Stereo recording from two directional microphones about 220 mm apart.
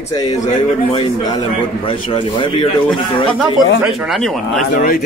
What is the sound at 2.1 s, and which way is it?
Speech, 20° left (ahead or behind).